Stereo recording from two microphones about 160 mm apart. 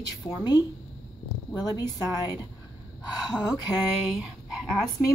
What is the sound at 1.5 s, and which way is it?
A woman's voice, 25° left (ahead or behind).